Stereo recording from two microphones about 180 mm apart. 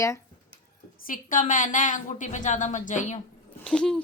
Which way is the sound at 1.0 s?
45° left (ahead or behind).